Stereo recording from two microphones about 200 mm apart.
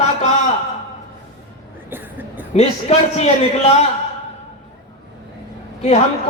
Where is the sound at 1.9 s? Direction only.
10° right (ahead or behind).